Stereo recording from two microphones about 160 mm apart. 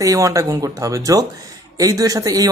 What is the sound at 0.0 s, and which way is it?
Speech, 20° right (ahead or behind).